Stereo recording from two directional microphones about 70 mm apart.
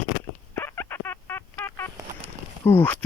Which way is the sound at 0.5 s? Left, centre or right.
Left.